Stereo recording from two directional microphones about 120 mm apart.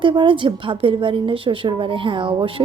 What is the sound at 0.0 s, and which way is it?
A woman's voice, 45° right (ahead or behind).